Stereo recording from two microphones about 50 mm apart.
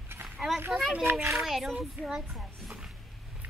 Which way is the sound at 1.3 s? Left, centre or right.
Centre.